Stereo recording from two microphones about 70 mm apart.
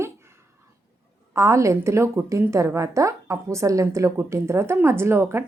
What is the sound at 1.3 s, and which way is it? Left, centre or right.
A woman's voice, right.